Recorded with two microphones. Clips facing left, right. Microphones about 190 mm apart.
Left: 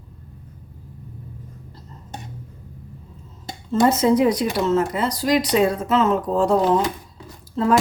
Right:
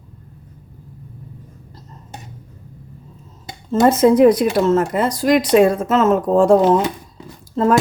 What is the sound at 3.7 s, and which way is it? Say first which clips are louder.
Speech: right 4 dB; 50° right (ahead or behind).